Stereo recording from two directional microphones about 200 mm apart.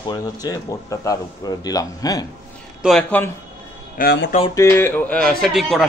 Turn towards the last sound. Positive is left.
turn(degrees=0)  # may be behind; listen again after turning